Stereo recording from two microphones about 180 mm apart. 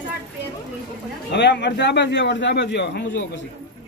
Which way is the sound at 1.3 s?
75° left (ahead or behind).